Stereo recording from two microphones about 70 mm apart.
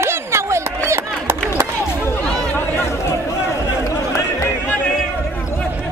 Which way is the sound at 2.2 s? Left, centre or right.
Centre.